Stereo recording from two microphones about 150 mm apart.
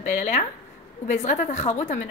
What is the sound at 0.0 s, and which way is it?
A woman's voice, 55° left (ahead or behind).